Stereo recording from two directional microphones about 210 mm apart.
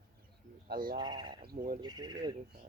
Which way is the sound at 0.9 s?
20° right (ahead or behind).